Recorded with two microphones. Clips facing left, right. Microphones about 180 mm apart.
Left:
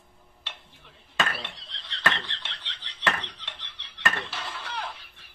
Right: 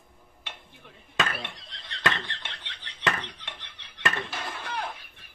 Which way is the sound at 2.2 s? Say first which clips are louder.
Right 1 dB; 50° right (ahead or behind).